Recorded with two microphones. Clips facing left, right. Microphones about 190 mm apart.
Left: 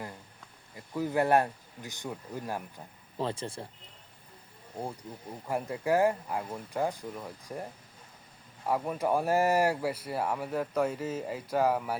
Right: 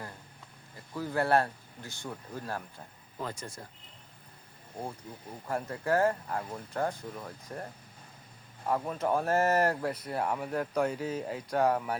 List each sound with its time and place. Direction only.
0.9 s speech: 15° left (ahead or behind)
3.2 s speech: 30° left (ahead or behind)
5.5 s speech: 15° left (ahead or behind)